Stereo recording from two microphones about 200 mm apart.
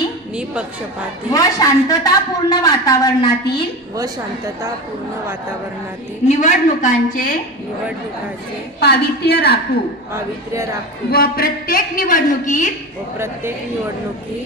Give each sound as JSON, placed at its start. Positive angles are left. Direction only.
{"t": 1.3, "sound": "speech", "side_deg": 15}
{"t": 6.2, "sound": "a woman's voice", "side_deg": 35}
{"t": 8.7, "sound": "a woman's voice", "side_deg": 55}
{"t": 10.1, "sound": "speech", "side_deg": -15}
{"t": 11.1, "sound": "a woman's voice", "side_deg": 50}